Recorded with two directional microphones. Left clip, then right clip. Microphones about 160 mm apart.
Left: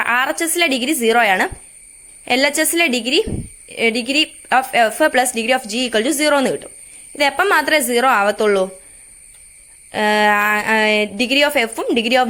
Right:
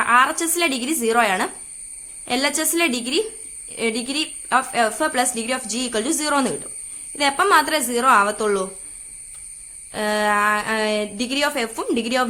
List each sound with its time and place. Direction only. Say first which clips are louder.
0.0 s a woman's voice: even; 30° left (ahead or behind)
9.9 s a woman's voice: left 6 dB; 30° left (ahead or behind)